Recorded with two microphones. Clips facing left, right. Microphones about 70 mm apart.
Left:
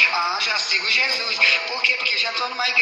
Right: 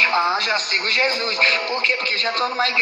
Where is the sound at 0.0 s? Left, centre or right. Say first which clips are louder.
Right 3 dB; right.